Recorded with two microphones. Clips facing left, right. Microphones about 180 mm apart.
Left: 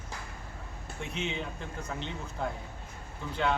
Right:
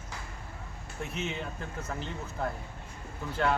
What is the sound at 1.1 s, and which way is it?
A man's voice, 5° right (ahead or behind).